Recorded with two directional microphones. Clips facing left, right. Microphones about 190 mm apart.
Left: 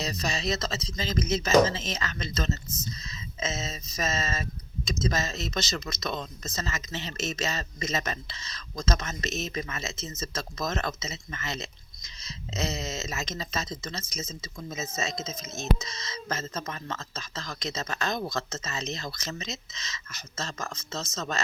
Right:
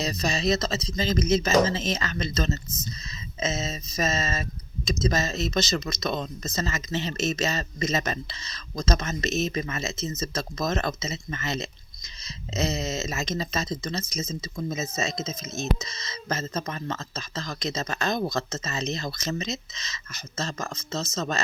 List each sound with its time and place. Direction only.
0.0 s speech: 30° right (ahead or behind)